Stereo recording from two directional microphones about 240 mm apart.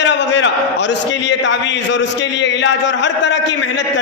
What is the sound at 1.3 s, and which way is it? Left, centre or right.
A man's voice, left.